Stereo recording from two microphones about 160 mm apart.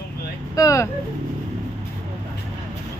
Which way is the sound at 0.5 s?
20° left (ahead or behind).